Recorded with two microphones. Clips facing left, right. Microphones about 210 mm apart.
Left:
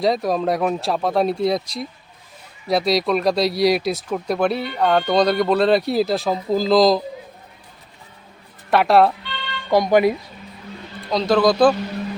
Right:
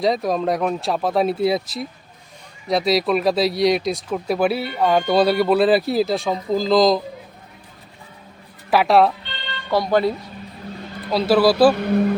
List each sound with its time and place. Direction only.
0.0 s speech: centre (ahead or behind)
8.7 s speech: centre (ahead or behind)
9.6 s speech: 15° left (ahead or behind)
11.1 s speech: 5° right (ahead or behind)
11.8 s speech: 60° right (ahead or behind)